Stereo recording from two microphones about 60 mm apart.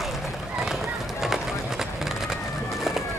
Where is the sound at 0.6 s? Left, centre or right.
Centre.